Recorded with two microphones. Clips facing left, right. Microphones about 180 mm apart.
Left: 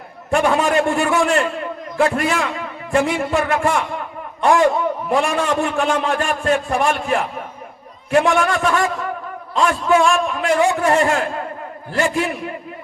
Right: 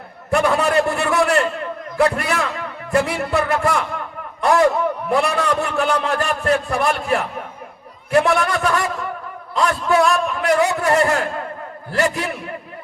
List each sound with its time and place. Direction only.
0.3 s a man's voice: 40° right (ahead or behind)